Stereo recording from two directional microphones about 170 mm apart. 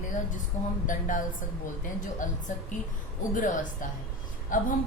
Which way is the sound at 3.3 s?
50° left (ahead or behind).